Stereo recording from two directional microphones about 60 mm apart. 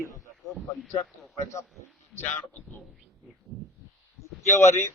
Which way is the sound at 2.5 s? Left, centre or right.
Left.